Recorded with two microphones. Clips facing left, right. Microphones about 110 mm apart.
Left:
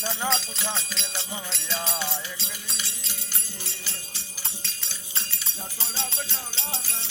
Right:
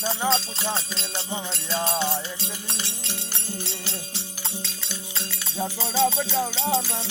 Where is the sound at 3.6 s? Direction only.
90° right.